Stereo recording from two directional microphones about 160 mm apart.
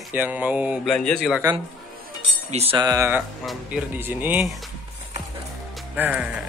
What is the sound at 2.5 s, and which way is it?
Speech, 40° right (ahead or behind).